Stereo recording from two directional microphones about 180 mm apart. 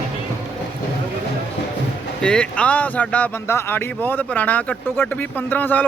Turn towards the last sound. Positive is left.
turn(degrees=10)  # may be behind; listen again after turning